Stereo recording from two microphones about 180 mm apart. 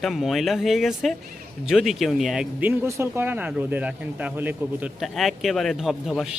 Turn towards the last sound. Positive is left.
turn(degrees=0)  # may be behind; listen again after turning